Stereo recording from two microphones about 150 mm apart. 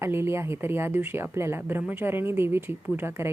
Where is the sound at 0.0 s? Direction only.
15° right (ahead or behind).